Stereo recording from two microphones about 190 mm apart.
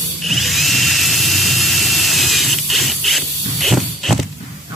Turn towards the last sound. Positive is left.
turn(degrees=0)  # may be behind; listen again after turning